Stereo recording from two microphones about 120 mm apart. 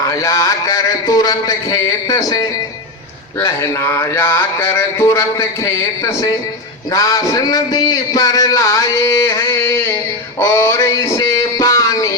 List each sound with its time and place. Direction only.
0.0 s a man's voice: 30° left (ahead or behind)
10.4 s music: 25° left (ahead or behind)